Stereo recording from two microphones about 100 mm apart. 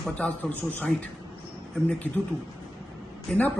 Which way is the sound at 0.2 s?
15° left (ahead or behind).